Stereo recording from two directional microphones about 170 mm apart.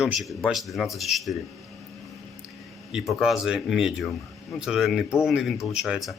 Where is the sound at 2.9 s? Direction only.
Centre (ahead or behind).